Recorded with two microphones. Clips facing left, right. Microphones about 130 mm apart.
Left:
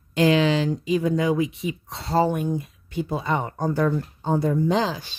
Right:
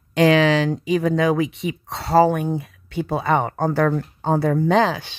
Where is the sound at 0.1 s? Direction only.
75° right (ahead or behind).